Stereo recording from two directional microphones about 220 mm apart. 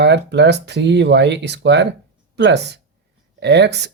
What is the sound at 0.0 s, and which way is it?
Speech, 50° right (ahead or behind).